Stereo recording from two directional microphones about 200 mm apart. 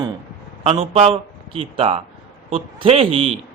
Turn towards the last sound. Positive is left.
turn(degrees=-25)  # may be behind; listen again after turning